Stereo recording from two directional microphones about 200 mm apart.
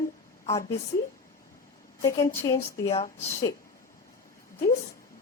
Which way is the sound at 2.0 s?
15° left (ahead or behind).